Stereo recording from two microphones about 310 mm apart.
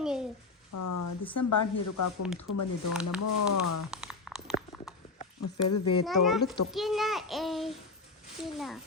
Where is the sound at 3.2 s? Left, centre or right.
Left.